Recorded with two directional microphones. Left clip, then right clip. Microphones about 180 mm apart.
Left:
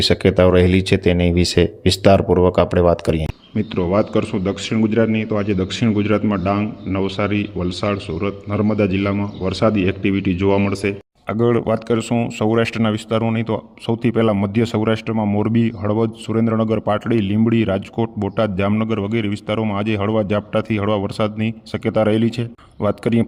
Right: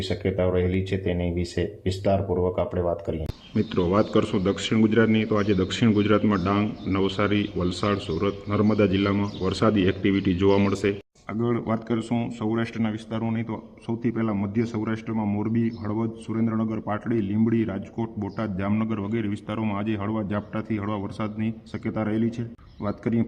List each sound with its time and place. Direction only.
0.0 s a man's voice: 45° left (ahead or behind)
3.5 s a man's voice: 25° left (ahead or behind)
11.3 s a man's voice: 45° left (ahead or behind)
12.5 s a man's voice: 50° left (ahead or behind)